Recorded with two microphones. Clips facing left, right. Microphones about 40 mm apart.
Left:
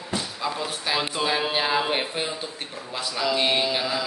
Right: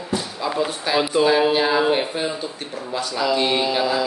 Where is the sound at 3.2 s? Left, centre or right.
Centre.